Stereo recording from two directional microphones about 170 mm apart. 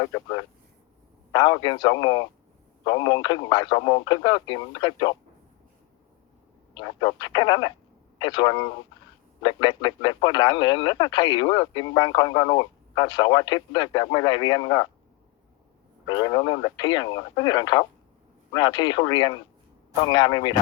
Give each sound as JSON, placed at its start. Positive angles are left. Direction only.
{"t": 0.0, "sound": "speech", "side_deg": 25}
{"t": 6.7, "sound": "speech", "side_deg": 25}
{"t": 16.0, "sound": "speech", "side_deg": 25}